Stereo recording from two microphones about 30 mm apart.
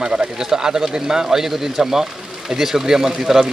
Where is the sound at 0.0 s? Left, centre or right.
Right.